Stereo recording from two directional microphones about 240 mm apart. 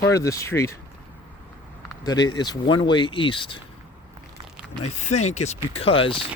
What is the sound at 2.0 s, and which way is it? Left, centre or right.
Speech, centre.